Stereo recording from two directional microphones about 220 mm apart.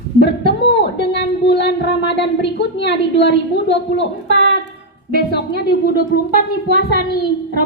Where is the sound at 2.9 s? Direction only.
50° left (ahead or behind).